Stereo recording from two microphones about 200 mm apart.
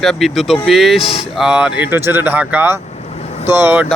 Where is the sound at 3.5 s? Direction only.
10° right (ahead or behind).